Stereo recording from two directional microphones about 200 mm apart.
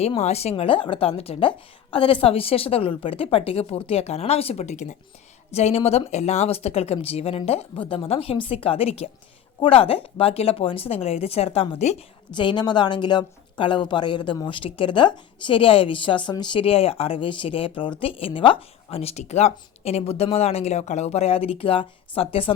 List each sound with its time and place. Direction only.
0.0 s speech: 30° left (ahead or behind)